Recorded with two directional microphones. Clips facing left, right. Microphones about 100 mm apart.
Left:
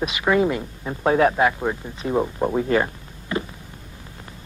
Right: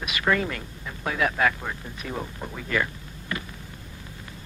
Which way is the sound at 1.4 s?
25° left (ahead or behind).